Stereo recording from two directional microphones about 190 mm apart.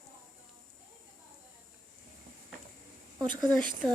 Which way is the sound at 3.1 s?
20° right (ahead or behind).